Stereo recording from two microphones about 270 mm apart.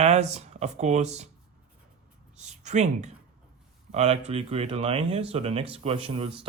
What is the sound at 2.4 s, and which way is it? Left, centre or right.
Speech, right.